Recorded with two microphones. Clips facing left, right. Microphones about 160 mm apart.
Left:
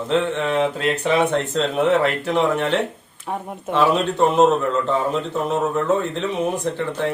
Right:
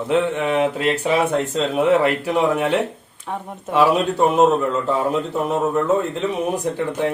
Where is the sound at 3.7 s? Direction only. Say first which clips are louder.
Right 2 dB; 10° right (ahead or behind).